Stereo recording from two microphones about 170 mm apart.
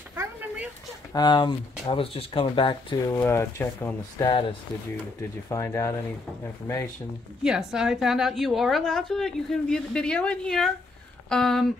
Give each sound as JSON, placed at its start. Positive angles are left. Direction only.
{"t": 0.1, "sound": "a sound", "side_deg": -10}
{"t": 1.1, "sound": "speech", "side_deg": 25}
{"t": 3.1, "sound": "speech", "side_deg": 15}
{"t": 4.3, "sound": "speech", "side_deg": 30}
{"t": 5.5, "sound": "speech", "side_deg": 15}
{"t": 7.4, "sound": "a woman's voice", "side_deg": -5}